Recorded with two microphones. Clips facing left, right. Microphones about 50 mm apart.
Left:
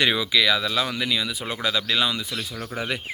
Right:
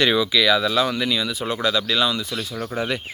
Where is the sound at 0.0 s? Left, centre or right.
Centre.